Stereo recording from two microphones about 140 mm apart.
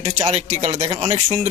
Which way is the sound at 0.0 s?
50° right (ahead or behind).